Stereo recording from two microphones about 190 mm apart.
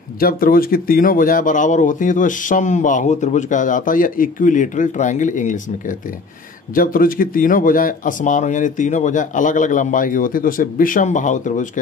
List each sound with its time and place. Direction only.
0.2 s speech: 50° left (ahead or behind)